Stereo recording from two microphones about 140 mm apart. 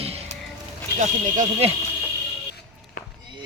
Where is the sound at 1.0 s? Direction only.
60° right (ahead or behind).